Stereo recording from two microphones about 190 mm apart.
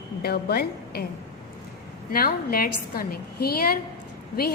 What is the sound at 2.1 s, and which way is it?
A woman's voice, 50° left (ahead or behind).